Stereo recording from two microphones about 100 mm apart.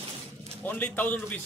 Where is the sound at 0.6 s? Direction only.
20° left (ahead or behind).